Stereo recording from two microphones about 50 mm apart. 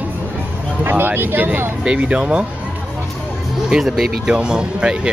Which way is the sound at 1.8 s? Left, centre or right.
Right.